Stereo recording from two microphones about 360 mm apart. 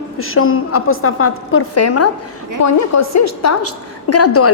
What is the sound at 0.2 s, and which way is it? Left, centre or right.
A woman's voice, left.